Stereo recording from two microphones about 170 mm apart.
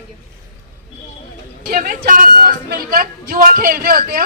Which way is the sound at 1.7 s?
55° right (ahead or behind).